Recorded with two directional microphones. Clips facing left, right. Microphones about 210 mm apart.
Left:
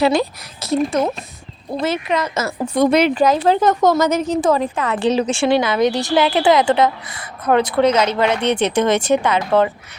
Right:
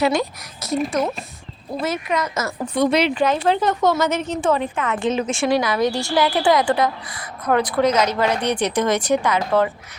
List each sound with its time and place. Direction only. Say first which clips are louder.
0.0 s speech: left 3 dB; 30° left (ahead or behind)
1.8 s a woman's voice: left 3 dB; 30° left (ahead or behind)
2.7 s a woman's voice: left 4 dB; 50° left (ahead or behind); by 9.6 s 25° left (ahead or behind)